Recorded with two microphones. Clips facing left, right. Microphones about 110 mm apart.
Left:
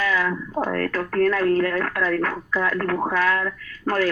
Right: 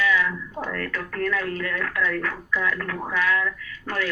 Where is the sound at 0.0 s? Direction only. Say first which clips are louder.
Left 1 dB; 40° left (ahead or behind).